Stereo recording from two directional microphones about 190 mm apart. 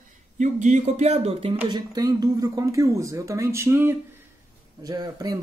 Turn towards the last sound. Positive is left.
turn(degrees=-20)  # may be behind; listen again after turning